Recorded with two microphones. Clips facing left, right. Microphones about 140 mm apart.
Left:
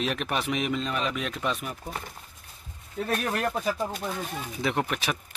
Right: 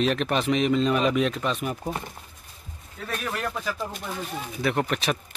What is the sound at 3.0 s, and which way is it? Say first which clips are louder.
Speech: left 2 dB; 55° left (ahead or behind).